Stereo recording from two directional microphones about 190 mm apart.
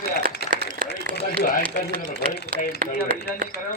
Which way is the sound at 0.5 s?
45° right (ahead or behind).